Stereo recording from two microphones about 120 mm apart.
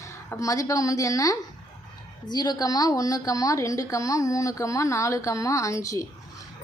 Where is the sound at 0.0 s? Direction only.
25° left (ahead or behind).